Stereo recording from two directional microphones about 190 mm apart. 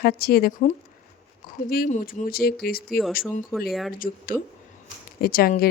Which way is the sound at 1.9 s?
40° left (ahead or behind).